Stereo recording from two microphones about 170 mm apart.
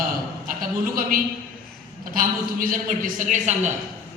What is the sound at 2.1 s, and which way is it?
Speech, 55° right (ahead or behind).